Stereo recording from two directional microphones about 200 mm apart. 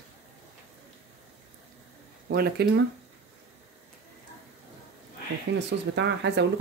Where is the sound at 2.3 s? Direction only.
50° right (ahead or behind).